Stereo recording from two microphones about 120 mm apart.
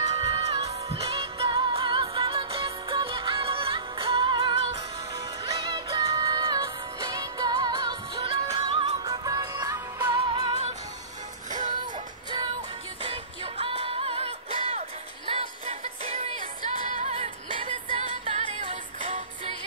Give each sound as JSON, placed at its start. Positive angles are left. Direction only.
{"t": 0.3, "sound": "music", "side_deg": -55}
{"t": 8.2, "sound": "music", "side_deg": -50}
{"t": 9.0, "sound": "music", "side_deg": -30}
{"t": 10.0, "sound": "music", "side_deg": -40}
{"t": 11.8, "sound": "music", "side_deg": -40}
{"t": 13.0, "sound": "music", "side_deg": -55}